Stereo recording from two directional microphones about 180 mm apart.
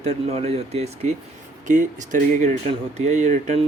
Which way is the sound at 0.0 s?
35° right (ahead or behind).